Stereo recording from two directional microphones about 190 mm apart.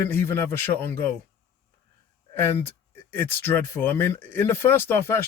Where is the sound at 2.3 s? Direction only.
15° left (ahead or behind).